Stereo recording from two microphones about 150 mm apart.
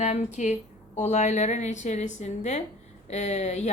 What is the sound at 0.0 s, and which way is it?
Speech, 50° left (ahead or behind).